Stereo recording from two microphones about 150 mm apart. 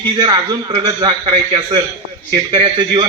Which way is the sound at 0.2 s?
30° right (ahead or behind).